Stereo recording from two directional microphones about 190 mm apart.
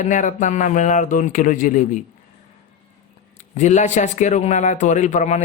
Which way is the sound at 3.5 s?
40° left (ahead or behind).